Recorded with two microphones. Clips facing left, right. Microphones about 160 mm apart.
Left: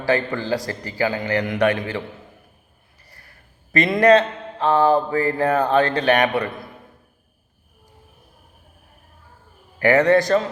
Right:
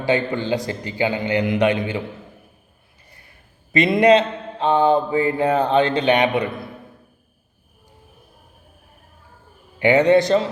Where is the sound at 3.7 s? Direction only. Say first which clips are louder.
Even; 20° right (ahead or behind).